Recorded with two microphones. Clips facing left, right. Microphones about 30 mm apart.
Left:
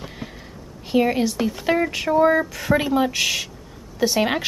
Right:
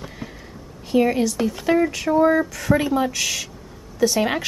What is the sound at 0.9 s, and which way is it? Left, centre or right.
Speech, centre.